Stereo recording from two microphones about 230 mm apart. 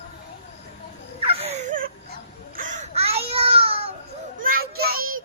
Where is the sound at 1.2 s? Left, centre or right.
Right.